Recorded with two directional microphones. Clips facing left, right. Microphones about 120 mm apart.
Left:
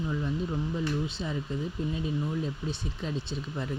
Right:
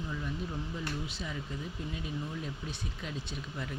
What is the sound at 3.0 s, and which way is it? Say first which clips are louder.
Speech: left 6 dB; 30° left (ahead or behind).